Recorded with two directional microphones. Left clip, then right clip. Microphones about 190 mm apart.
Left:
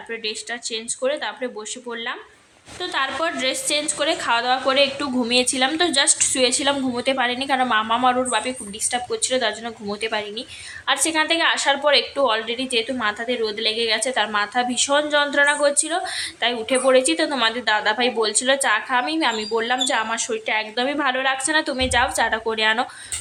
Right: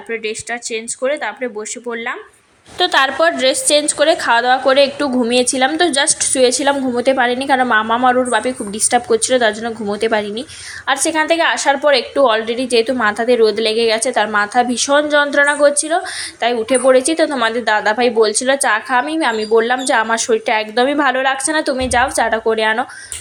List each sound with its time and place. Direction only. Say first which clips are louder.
0.1 s a woman's voice: right 6 dB; 15° right (ahead or behind)
2.7 s a woman's voice: right 10 dB; 45° right (ahead or behind); by 22.9 s 15° right (ahead or behind)